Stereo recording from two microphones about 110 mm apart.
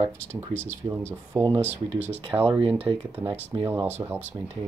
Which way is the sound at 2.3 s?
55° right (ahead or behind).